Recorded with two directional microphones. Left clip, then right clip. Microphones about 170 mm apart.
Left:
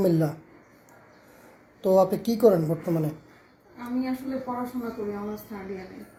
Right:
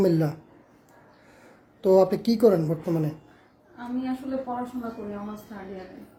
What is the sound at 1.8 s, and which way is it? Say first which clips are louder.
Speech: right 1 dB; 30° right (ahead or behind).